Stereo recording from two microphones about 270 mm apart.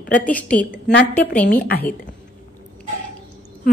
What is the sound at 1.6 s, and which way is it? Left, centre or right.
Speech, left.